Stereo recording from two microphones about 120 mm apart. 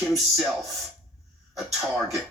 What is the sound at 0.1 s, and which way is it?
Speech, centre (ahead or behind).